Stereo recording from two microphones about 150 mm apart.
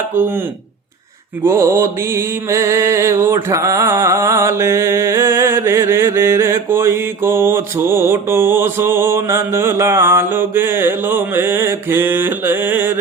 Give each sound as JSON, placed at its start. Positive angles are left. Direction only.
{"t": 0.2, "sound": "mantra", "side_deg": -15}
{"t": 1.5, "sound": "mantra", "side_deg": -20}